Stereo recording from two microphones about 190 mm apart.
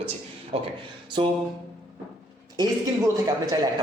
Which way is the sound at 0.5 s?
30° right (ahead or behind).